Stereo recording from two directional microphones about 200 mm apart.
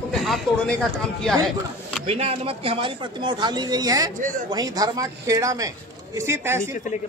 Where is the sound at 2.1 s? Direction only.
30° right (ahead or behind).